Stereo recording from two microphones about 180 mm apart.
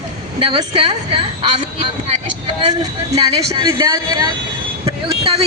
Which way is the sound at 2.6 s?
25° right (ahead or behind).